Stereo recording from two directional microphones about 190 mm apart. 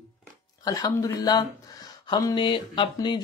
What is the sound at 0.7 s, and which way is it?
Speech, 20° left (ahead or behind).